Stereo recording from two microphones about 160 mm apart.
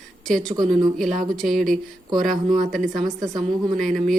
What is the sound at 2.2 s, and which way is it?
Speech, 55° right (ahead or behind).